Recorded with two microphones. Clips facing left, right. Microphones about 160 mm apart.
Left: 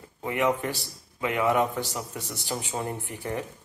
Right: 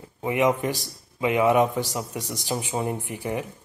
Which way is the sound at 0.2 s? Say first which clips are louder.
Right 4 dB; 20° right (ahead or behind).